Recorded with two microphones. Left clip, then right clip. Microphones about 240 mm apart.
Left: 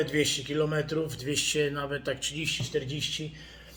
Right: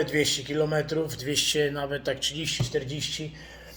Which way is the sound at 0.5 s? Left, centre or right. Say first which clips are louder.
Right 3 dB; right.